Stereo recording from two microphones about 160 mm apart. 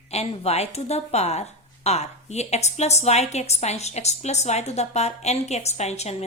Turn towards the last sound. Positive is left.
turn(degrees=40)  # may be behind; listen again after turning